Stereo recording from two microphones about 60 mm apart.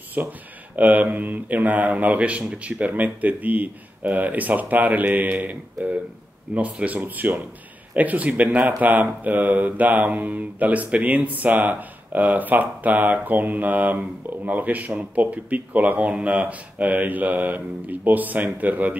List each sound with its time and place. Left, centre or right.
0.2 s speech: right